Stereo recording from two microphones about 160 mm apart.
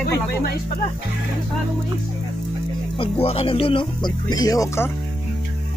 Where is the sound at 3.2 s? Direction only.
35° left (ahead or behind); by 4.9 s 20° left (ahead or behind).